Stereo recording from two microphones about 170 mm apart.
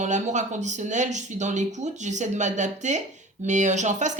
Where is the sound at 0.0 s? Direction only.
45° right (ahead or behind).